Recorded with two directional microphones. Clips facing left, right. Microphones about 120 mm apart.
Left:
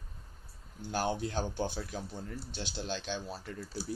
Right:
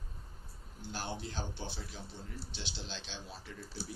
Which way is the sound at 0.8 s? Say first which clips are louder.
Left 8 dB; 55° left (ahead or behind).